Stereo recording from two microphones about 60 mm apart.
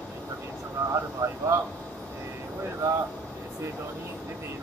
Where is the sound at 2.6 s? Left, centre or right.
Right.